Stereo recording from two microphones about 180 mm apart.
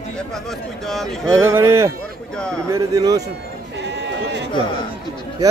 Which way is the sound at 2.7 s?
20° right (ahead or behind).